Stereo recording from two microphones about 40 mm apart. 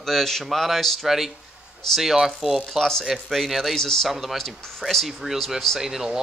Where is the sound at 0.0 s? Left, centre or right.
Centre.